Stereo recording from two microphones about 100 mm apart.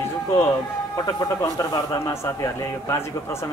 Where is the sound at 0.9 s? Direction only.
40° left (ahead or behind).